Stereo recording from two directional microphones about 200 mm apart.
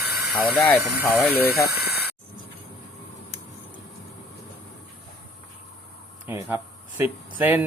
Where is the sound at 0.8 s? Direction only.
10° right (ahead or behind).